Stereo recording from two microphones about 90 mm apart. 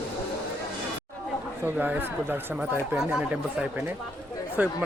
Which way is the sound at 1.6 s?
20° right (ahead or behind).